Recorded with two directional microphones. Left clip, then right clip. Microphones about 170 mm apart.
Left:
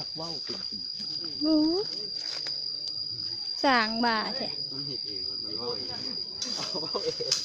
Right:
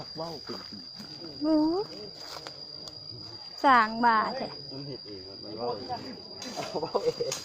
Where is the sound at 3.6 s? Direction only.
30° left (ahead or behind).